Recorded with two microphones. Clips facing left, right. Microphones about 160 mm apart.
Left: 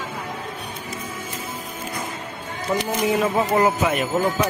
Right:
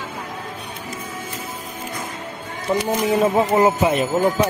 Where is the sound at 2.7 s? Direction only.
20° right (ahead or behind).